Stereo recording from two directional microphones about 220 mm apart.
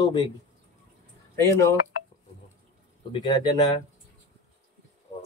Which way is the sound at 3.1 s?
20° left (ahead or behind).